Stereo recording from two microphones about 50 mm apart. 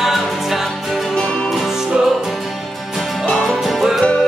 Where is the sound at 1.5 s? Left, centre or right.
Centre.